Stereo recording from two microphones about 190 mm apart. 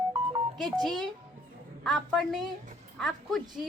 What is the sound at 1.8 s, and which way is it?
A child's voice, centre (ahead or behind).